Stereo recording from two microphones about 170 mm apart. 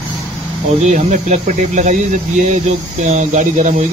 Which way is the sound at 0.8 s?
45° right (ahead or behind).